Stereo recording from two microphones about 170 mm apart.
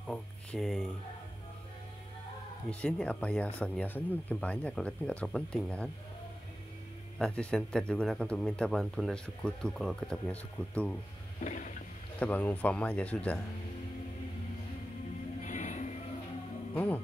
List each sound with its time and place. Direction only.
0.0 s speech: 5° left (ahead or behind)
2.7 s speech: 5° left (ahead or behind)
7.2 s speech: 5° left (ahead or behind)
11.4 s a sound: 50° left (ahead or behind)
12.2 s speech: 10° left (ahead or behind)
15.4 s music: 45° left (ahead or behind)
16.7 s speech: 10° left (ahead or behind)